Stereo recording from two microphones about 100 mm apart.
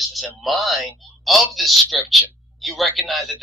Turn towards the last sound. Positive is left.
turn(degrees=0)  # may be behind; listen again after turning